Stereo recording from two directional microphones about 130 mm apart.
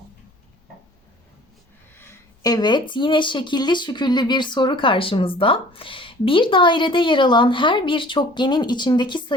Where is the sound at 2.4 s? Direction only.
30° left (ahead or behind).